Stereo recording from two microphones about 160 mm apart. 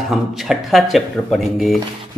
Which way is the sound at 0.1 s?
Centre (ahead or behind).